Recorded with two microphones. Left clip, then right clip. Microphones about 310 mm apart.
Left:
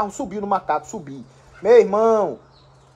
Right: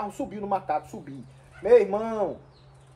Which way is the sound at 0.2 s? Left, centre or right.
Left.